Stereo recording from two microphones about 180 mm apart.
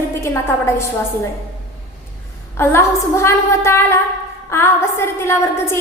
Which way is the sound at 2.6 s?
15° left (ahead or behind).